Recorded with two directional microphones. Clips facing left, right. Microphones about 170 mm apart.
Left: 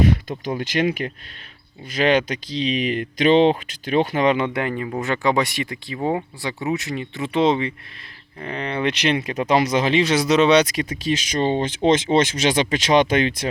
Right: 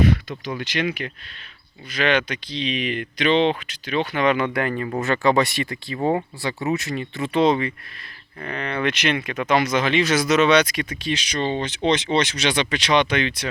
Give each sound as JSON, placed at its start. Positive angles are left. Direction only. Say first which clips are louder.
{"t": 0.3, "sound": "speech", "louder": "left 3 dB", "side_deg": 50}
{"t": 4.4, "sound": "speech", "louder": "even", "side_deg": 15}
{"t": 6.0, "sound": "speech", "louder": "right 1 dB", "side_deg": 5}
{"t": 6.4, "sound": "speech", "louder": "right 1 dB", "side_deg": 15}